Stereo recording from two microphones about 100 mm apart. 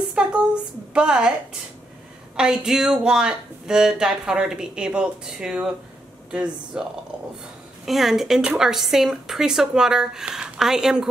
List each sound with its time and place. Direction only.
0.1 s a sound: 10° right (ahead or behind)
0.9 s speech: 10° right (ahead or behind)
2.3 s speech: 5° right (ahead or behind)